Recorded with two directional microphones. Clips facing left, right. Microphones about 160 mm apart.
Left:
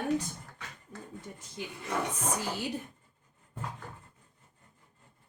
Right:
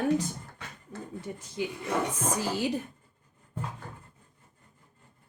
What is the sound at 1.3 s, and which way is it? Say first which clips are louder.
Speech: right 8 dB; 90° right.